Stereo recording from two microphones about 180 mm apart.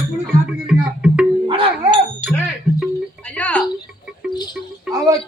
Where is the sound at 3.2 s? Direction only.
10° left (ahead or behind).